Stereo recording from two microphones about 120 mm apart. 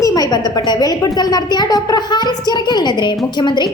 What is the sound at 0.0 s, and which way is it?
A woman's voice, 30° left (ahead or behind).